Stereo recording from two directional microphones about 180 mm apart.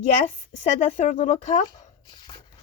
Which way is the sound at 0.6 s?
35° left (ahead or behind).